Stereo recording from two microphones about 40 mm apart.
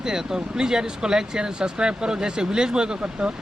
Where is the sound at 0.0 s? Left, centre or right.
Centre.